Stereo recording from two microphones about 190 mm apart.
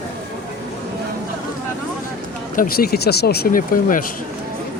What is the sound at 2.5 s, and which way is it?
Speech, 50° left (ahead or behind).